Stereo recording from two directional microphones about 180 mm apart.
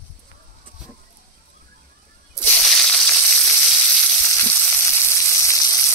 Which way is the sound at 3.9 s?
10° left (ahead or behind).